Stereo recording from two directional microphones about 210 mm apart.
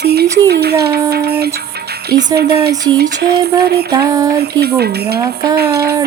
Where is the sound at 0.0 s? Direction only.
50° right (ahead or behind).